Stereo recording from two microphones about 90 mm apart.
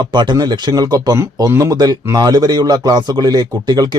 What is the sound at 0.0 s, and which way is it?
A man's voice, 55° right (ahead or behind).